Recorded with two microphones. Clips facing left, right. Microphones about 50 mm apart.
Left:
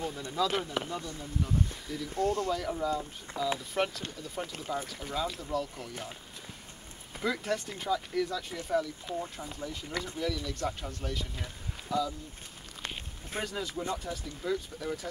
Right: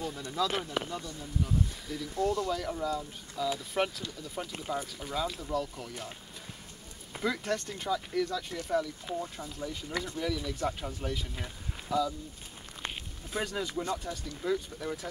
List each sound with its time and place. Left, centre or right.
0.3 s speech: centre
2.1 s speech: left
2.5 s speech: centre
7.2 s speech: centre
13.4 s speech: centre